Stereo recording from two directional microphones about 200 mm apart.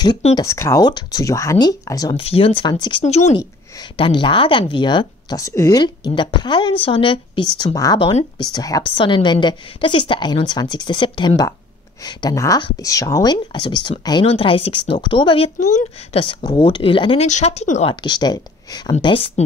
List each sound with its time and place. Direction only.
0.0 s speech: 25° left (ahead or behind)
0.4 s speech: 15° left (ahead or behind)
3.1 s speech: 35° left (ahead or behind)
18.0 s speech: 20° left (ahead or behind)